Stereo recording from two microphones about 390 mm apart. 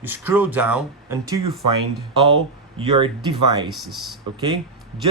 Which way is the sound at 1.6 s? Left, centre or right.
Right.